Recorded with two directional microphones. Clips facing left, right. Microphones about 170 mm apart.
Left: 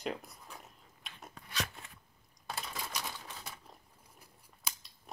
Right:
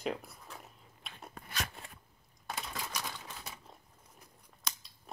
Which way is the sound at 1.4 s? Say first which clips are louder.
Left 1 dB; 50° right (ahead or behind).